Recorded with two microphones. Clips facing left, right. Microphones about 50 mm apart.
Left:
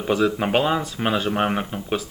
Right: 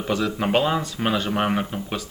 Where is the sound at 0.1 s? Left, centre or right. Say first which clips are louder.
Left 2 dB; centre.